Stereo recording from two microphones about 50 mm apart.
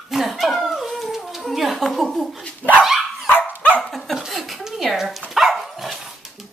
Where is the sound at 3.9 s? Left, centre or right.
Centre.